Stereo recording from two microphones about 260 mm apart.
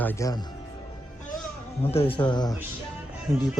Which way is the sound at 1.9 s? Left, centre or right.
Left.